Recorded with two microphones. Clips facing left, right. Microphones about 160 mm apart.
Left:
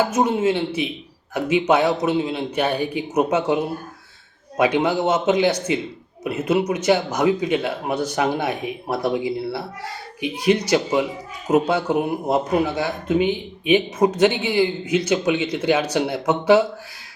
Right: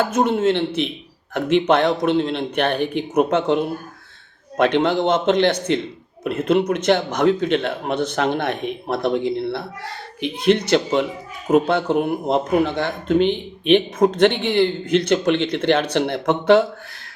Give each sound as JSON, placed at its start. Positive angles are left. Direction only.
{"t": 0.0, "sound": "a man's voice", "side_deg": 10}